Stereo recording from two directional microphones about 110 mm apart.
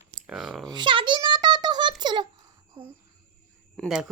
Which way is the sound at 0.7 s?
45° right (ahead or behind).